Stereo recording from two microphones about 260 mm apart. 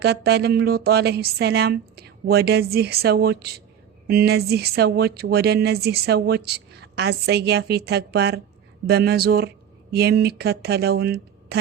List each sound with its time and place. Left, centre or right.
0.0 s speech: right